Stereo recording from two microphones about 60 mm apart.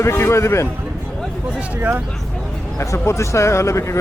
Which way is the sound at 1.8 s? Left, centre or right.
Right.